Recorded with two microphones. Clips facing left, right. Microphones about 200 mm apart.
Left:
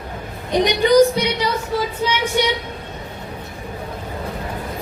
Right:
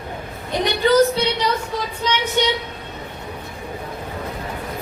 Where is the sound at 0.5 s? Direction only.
15° left (ahead or behind).